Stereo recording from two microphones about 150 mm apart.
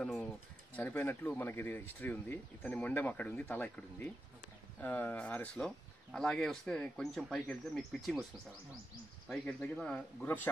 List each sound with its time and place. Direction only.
0.0 s a sound: 5° left (ahead or behind)
0.7 s speech: 10° left (ahead or behind)
9.3 s speech: 5° left (ahead or behind)